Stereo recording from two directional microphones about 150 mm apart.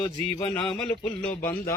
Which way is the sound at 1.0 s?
10° left (ahead or behind).